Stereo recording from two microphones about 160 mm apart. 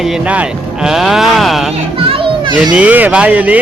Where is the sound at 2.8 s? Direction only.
10° right (ahead or behind).